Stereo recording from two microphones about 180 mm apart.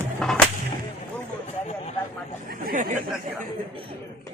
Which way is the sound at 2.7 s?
45° right (ahead or behind).